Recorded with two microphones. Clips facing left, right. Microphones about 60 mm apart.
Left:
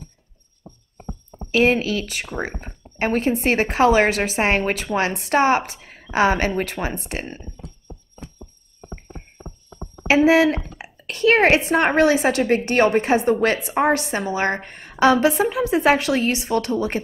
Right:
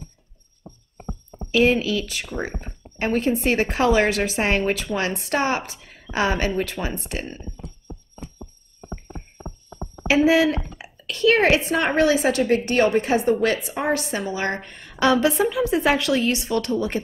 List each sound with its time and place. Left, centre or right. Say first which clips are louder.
1.5 s a woman's voice: left 1 dB; left
2.4 s speech: left 1 dB; centre
3.0 s a woman's voice: left 1 dB; left
10.0 s a woman's voice: left 2 dB; left